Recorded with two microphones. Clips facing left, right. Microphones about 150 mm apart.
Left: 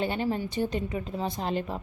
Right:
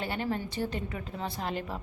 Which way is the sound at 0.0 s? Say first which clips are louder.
Left 4 dB; 20° left (ahead or behind).